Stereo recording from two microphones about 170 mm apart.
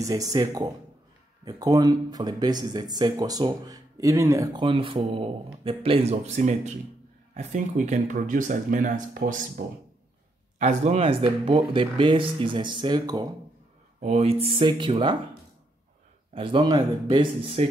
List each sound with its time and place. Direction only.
0.0 s speech: 20° right (ahead or behind); by 9.4 s 55° right (ahead or behind)
10.6 s speech: 40° right (ahead or behind); by 13.3 s 25° right (ahead or behind)
14.0 s speech: 35° right (ahead or behind)
16.3 s speech: 30° right (ahead or behind)